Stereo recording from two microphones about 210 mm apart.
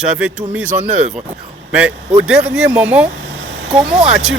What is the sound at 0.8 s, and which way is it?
Speech, 35° right (ahead or behind).